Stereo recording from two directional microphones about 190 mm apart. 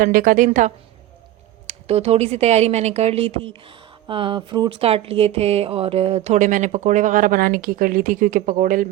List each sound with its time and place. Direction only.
0.0 s a woman's voice: 45° right (ahead or behind)